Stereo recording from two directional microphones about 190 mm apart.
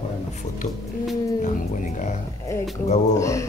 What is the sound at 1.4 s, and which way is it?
Speech, 40° left (ahead or behind).